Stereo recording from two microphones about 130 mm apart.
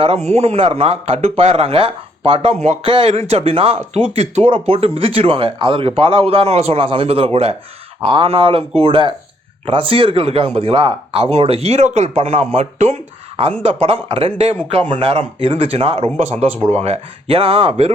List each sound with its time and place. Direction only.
0.0 s speech: 55° right (ahead or behind)
2.8 s speech: 45° right (ahead or behind)
12.5 s speech: 65° right (ahead or behind)
13.6 s speech: 50° right (ahead or behind)